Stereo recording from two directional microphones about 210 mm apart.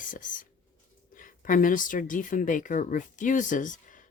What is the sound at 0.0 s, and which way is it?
A woman's voice, 40° left (ahead or behind).